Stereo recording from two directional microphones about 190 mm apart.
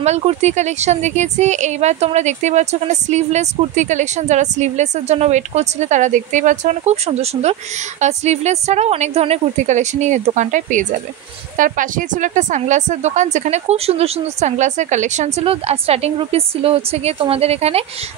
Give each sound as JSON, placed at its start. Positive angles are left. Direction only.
{"t": 0.0, "sound": "speech", "side_deg": -35}